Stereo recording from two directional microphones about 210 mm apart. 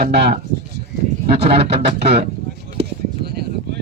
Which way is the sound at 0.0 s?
50° right (ahead or behind).